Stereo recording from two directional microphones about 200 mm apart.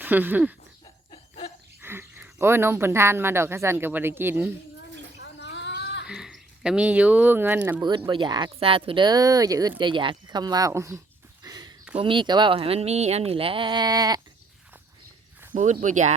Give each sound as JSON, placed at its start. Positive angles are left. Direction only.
{"t": 0.0, "sound": "speech", "side_deg": -10}
{"t": 1.1, "sound": "laughter", "side_deg": 25}
{"t": 1.8, "sound": "speech", "side_deg": -10}
{"t": 5.2, "sound": "a sound", "side_deg": 60}
{"t": 6.1, "sound": "speech", "side_deg": -5}
{"t": 7.8, "sound": "speech", "side_deg": -20}
{"t": 11.4, "sound": "a sound", "side_deg": -20}
{"t": 11.9, "sound": "speech", "side_deg": -25}
{"t": 15.5, "sound": "speech", "side_deg": -35}